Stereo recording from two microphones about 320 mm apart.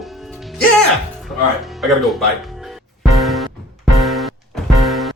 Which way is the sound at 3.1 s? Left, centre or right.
Centre.